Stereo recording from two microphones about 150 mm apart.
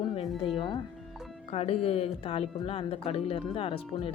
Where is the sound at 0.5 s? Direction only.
35° left (ahead or behind).